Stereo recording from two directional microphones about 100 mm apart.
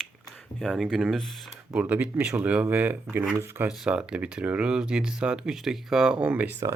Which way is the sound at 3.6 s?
10° right (ahead or behind).